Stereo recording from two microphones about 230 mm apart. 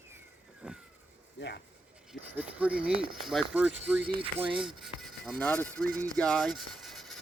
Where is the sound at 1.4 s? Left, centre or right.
Left.